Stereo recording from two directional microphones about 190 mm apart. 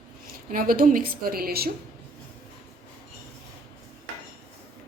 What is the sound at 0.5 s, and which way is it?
A woman's voice, 50° right (ahead or behind).